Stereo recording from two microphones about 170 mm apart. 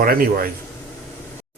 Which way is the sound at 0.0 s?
60° right (ahead or behind).